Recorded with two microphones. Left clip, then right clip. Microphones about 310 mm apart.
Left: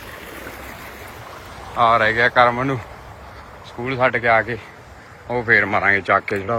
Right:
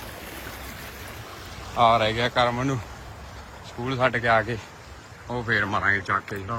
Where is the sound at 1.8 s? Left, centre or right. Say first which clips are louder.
Left 5 dB; centre.